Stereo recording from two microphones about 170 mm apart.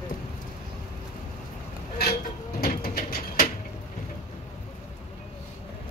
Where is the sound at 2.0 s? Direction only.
65° left (ahead or behind).